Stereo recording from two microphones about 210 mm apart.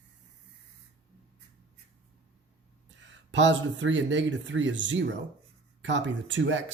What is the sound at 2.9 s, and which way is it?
Speech, 60° right (ahead or behind).